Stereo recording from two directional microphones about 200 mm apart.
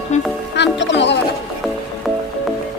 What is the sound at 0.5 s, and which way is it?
Music, 60° left (ahead or behind).